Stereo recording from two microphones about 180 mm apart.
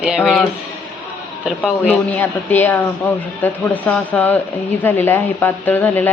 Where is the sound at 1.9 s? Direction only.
10° left (ahead or behind).